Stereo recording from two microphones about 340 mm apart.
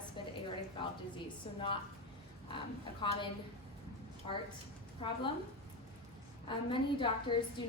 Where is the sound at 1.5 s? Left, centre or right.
Centre.